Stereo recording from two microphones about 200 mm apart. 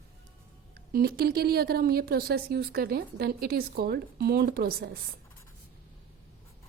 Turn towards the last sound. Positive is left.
turn(degrees=-45)  # may be behind; listen again after turning